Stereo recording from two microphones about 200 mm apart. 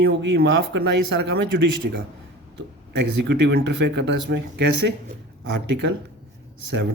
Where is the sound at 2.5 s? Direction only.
60° right (ahead or behind).